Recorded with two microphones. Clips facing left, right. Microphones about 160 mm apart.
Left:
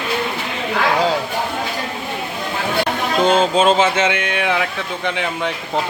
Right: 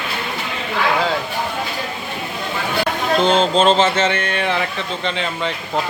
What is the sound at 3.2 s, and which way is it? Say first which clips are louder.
Speech: left 1 dB; 10° left (ahead or behind).